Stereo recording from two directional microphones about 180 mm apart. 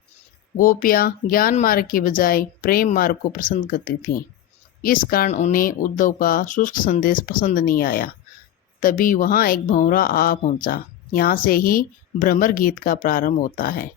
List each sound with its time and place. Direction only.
0.5 s speech: 50° left (ahead or behind)
5.3 s speech: 45° left (ahead or behind)